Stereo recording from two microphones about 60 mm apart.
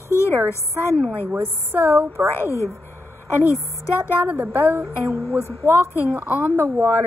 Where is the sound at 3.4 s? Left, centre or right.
Right.